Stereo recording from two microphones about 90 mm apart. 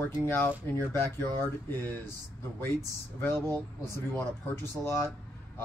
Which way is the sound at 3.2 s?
25° left (ahead or behind).